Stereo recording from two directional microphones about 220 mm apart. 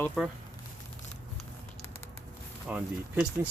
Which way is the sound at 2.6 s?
5° right (ahead or behind).